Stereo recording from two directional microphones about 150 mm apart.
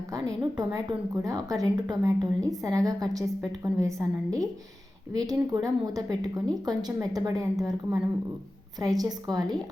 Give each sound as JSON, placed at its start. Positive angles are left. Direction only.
{"t": 0.1, "sound": "a woman's voice", "side_deg": -25}
{"t": 8.8, "sound": "a woman's voice", "side_deg": -25}